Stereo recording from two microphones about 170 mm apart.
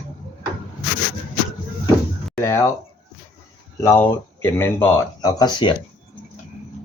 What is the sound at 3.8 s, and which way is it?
Speech, 15° left (ahead or behind).